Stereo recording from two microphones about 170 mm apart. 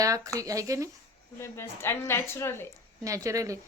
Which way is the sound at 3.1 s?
20° right (ahead or behind).